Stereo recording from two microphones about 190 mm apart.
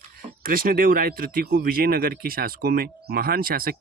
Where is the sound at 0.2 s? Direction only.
50° right (ahead or behind).